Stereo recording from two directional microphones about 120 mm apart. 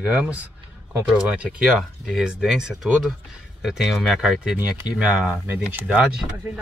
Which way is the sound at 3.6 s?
Centre (ahead or behind).